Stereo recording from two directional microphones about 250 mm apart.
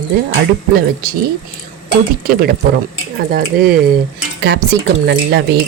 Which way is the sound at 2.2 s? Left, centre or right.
Right.